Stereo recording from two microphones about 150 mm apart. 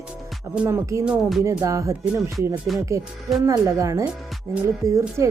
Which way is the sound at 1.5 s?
20° right (ahead or behind).